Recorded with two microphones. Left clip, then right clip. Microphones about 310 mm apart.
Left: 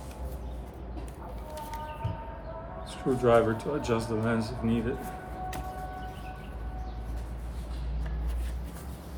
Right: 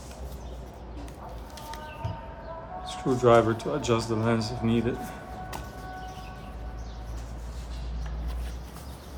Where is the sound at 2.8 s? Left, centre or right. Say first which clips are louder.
Right 3 dB; centre.